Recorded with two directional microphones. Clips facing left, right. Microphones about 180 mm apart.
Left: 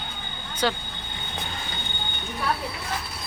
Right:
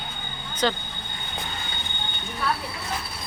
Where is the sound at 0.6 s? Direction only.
10° left (ahead or behind).